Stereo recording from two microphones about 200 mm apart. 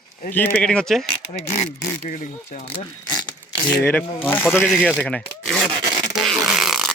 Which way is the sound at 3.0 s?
20° left (ahead or behind).